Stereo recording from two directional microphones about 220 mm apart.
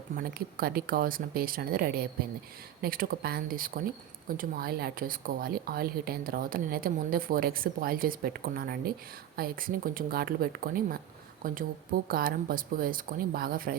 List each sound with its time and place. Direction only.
0.2 s speech: 40° right (ahead or behind)